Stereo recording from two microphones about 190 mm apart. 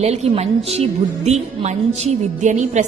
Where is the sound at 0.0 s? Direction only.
35° right (ahead or behind).